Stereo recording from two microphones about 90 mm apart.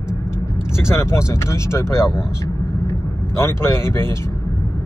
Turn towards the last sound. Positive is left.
turn(degrees=25)  # may be behind; listen again after turning